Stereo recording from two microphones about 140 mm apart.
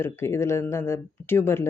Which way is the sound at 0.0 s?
20° left (ahead or behind).